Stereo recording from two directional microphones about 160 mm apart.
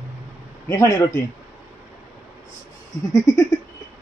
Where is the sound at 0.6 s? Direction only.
20° left (ahead or behind).